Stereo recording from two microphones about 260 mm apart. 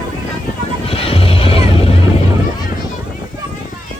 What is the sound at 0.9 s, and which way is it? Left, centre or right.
Music, left.